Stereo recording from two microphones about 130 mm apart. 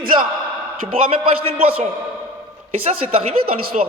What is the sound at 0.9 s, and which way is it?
Speech, 45° right (ahead or behind).